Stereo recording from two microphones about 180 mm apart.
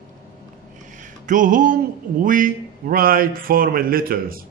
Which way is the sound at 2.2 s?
50° right (ahead or behind).